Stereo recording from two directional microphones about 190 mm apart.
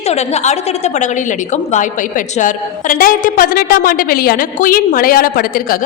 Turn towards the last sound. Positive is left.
turn(degrees=50)  # may be behind; listen again after turning